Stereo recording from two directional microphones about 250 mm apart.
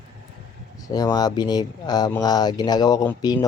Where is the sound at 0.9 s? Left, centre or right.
Centre.